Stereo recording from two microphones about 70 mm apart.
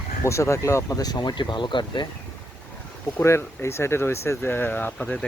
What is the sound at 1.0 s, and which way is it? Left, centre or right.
Speech, left.